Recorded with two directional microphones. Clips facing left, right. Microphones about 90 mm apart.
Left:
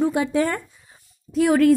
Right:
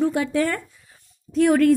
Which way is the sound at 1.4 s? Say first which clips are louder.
Even; 5° left (ahead or behind).